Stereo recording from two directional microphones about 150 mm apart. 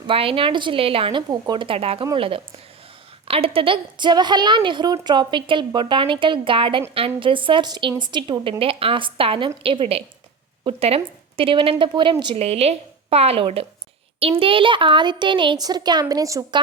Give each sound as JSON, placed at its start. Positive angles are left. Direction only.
{"t": 0.1, "sound": "a woman's voice", "side_deg": -35}